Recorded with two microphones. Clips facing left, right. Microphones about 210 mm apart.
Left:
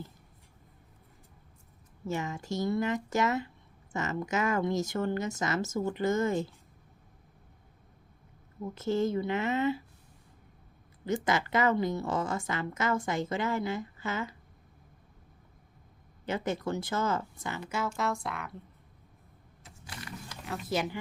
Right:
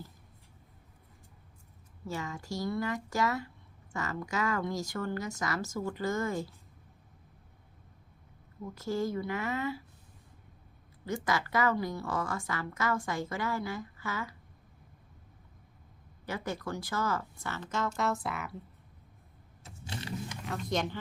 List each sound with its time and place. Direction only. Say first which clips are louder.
2.0 s a woman's voice: left 4 dB; 20° left (ahead or behind)
8.6 s a woman's voice: left 4 dB; 25° left (ahead or behind)
11.0 s a woman's voice: left 3 dB; 20° left (ahead or behind)
16.2 s speech: left 4 dB; 20° left (ahead or behind); by 18.5 s 5° right (ahead or behind)
19.6 s power windows: right 5 dB; 25° right (ahead or behind)
20.4 s speech: left 2 dB; 5° left (ahead or behind)